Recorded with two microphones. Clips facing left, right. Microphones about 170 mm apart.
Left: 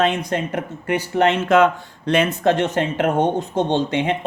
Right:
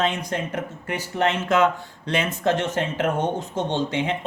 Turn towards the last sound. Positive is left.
turn(degrees=60)  # may be behind; listen again after turning